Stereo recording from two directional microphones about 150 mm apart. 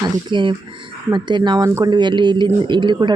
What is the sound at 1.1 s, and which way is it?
Speech, 30° right (ahead or behind).